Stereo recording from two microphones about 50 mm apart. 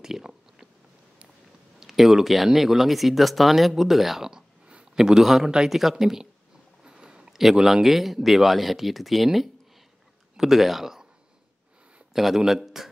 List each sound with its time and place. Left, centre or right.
0.0 s chewing: centre
1.8 s a man's voice: centre
6.8 s a sound: centre
7.3 s speech: centre
12.1 s speech: centre